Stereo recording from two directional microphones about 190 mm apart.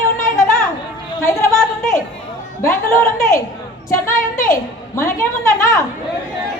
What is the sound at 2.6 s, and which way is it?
Speech, 15° left (ahead or behind).